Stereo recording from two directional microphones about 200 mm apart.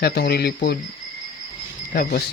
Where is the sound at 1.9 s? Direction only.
40° left (ahead or behind).